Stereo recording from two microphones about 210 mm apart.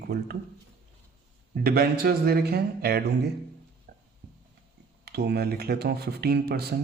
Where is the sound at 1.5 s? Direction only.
45° right (ahead or behind).